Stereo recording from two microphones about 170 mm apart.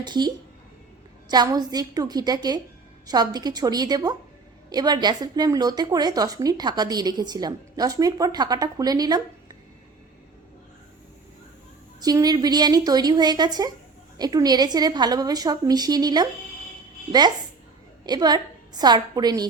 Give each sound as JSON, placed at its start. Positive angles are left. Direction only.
{"t": 0.0, "sound": "a woman's voice", "side_deg": -25}
{"t": 11.9, "sound": "a woman's voice", "side_deg": -25}